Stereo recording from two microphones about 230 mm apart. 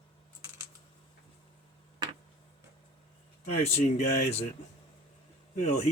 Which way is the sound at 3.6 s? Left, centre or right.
Left.